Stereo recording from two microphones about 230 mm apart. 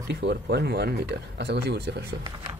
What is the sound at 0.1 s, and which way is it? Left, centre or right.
Speech, right.